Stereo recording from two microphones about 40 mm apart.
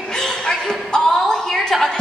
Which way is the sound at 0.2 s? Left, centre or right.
Centre.